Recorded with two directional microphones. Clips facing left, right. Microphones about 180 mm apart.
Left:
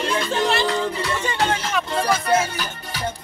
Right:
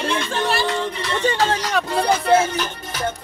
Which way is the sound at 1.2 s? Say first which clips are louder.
Right 6 dB; 35° right (ahead or behind).